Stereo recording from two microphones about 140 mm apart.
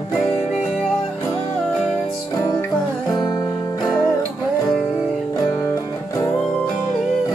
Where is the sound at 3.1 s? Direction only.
25° left (ahead or behind).